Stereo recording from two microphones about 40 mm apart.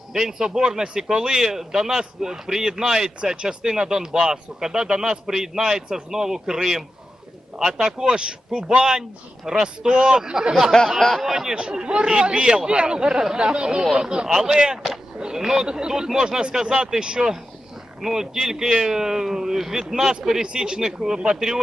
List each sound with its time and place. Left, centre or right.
0.1 s speech: centre
10.5 s speech: centre